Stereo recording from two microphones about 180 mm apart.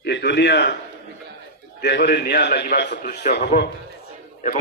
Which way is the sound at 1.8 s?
70° left (ahead or behind).